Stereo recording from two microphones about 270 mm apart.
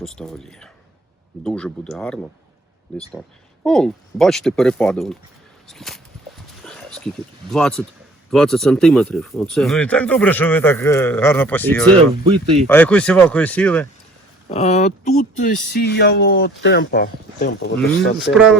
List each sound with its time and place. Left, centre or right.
0.0 s speech: centre
6.6 s a sound: centre
7.5 s speech: centre
11.9 s speech: centre
12.6 s speech: centre
14.5 s speech: left